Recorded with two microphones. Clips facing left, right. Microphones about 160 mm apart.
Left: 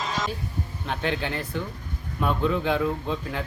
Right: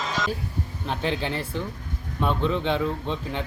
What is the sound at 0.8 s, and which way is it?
Speech, centre (ahead or behind).